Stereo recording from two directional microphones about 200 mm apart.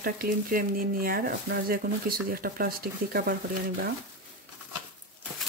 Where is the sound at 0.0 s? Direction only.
45° right (ahead or behind).